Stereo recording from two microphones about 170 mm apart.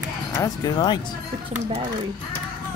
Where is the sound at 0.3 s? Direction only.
20° left (ahead or behind).